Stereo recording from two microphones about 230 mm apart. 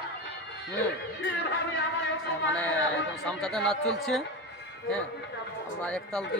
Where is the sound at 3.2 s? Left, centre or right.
Centre.